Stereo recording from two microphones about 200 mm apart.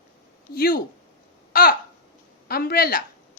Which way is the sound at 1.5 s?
50° left (ahead or behind).